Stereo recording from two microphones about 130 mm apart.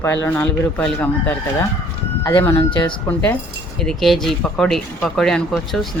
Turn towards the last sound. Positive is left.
turn(degrees=0)  # may be behind; listen again after turning